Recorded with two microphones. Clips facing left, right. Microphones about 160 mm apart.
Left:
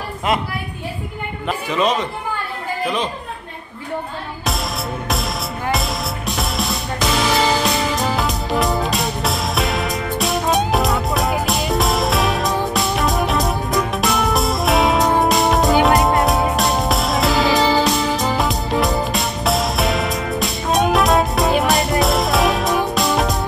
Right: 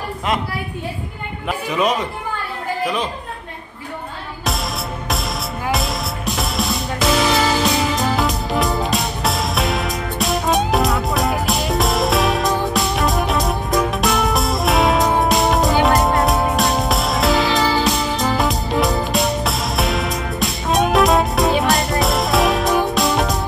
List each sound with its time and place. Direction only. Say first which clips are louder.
1.8 s speech: even; 10° right (ahead or behind)
5.7 s music: even; centre (ahead or behind)